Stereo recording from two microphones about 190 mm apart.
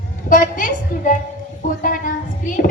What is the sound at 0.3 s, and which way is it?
A woman's voice, 45° left (ahead or behind).